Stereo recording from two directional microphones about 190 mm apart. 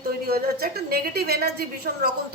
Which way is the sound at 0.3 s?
55° right (ahead or behind).